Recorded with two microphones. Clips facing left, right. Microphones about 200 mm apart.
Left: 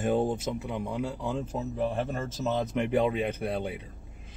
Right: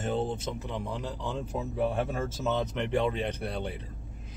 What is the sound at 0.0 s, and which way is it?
Speech, 10° left (ahead or behind).